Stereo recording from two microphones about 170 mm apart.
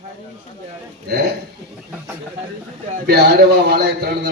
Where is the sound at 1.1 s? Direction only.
65° right (ahead or behind).